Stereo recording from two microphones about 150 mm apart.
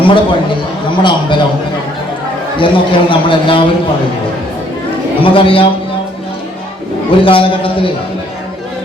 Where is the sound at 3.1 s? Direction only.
35° left (ahead or behind).